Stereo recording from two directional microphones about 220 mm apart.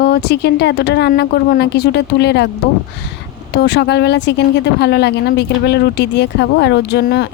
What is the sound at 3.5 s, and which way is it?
A woman's voice, 50° left (ahead or behind).